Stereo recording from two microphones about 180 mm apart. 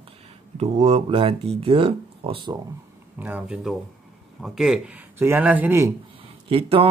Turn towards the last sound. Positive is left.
turn(degrees=-30)  # may be behind; listen again after turning